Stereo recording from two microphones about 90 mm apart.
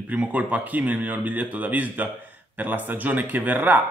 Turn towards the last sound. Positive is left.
turn(degrees=-20)  # may be behind; listen again after turning